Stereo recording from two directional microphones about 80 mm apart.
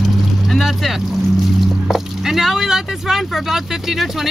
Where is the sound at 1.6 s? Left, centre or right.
Centre.